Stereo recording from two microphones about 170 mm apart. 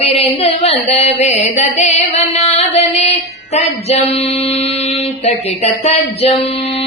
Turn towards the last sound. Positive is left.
turn(degrees=40)  # may be behind; listen again after turning